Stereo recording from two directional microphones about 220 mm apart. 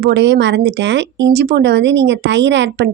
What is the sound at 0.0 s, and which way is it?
A woman's voice, 50° right (ahead or behind).